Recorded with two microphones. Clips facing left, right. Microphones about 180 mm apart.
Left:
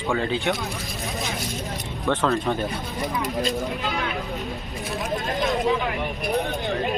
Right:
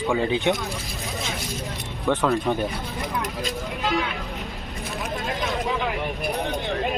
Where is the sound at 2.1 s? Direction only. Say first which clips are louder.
Right 1 dB; 15° right (ahead or behind).